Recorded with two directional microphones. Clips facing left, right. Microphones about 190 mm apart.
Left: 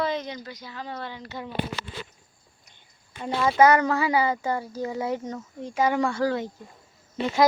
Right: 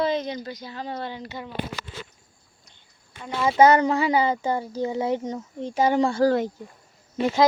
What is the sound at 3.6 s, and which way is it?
Speech, 25° right (ahead or behind).